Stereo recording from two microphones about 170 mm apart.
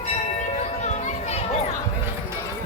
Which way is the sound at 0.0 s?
45° left (ahead or behind).